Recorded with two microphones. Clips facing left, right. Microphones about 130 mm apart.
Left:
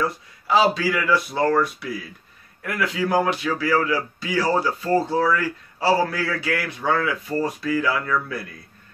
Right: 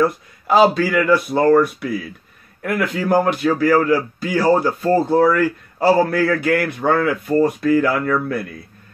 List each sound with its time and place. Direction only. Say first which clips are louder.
0.0 s speech: right 7 dB; 50° right (ahead or behind)